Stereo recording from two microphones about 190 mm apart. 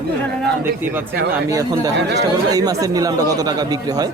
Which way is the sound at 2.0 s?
65° right (ahead or behind).